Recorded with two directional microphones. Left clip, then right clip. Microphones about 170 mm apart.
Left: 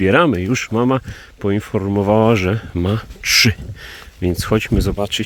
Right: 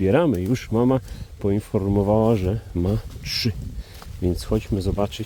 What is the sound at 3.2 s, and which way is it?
Speech, 20° left (ahead or behind).